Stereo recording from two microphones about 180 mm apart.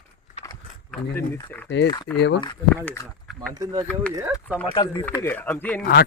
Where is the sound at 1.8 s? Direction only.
25° left (ahead or behind).